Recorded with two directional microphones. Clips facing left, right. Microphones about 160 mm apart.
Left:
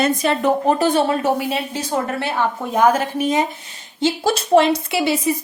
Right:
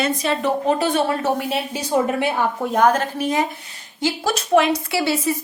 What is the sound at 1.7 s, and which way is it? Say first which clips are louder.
Speech: right 2 dB; 10° right (ahead or behind).